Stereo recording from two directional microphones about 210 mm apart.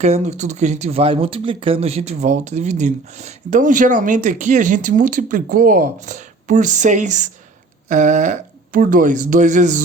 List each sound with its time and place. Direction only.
0.0 s speech: 30° right (ahead or behind)